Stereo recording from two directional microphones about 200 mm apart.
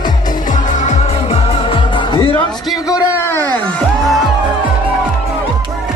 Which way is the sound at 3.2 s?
10° left (ahead or behind).